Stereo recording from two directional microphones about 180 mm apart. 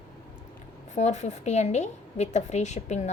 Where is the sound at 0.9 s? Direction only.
40° left (ahead or behind).